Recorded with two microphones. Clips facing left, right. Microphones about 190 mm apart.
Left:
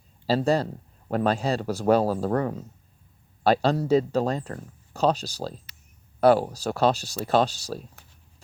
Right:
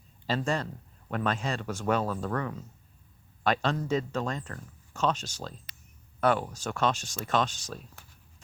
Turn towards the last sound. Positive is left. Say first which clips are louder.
# left 6 dB
turn(degrees=35)  # may be behind; listen again after turning